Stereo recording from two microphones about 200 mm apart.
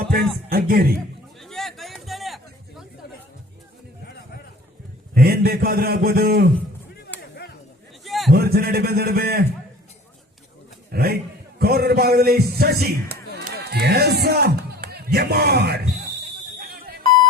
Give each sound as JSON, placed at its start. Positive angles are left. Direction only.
{"t": 0.1, "sound": "a man's voice", "side_deg": -50}
{"t": 1.4, "sound": "a sound", "side_deg": 0}
{"t": 5.1, "sound": "a man's voice", "side_deg": -50}
{"t": 8.0, "sound": "a sound", "side_deg": 0}
{"t": 8.3, "sound": "a man's voice", "side_deg": -50}
{"t": 10.9, "sound": "a man's voice", "side_deg": -50}